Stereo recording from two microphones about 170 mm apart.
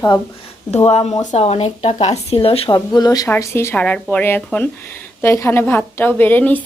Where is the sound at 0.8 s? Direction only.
40° left (ahead or behind).